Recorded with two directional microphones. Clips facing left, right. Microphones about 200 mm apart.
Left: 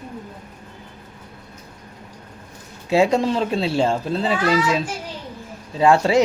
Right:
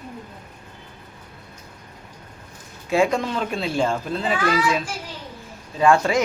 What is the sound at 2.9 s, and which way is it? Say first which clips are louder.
A child's voice: left 3 dB; 25° left (ahead or behind).